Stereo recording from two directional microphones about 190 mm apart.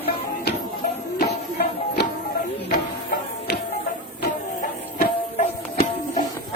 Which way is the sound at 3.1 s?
60° left (ahead or behind).